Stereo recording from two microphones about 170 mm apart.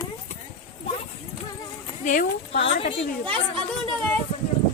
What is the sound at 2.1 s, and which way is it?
Speech, 55° left (ahead or behind).